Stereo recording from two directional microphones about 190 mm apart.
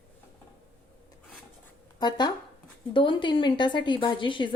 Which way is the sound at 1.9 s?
20° left (ahead or behind).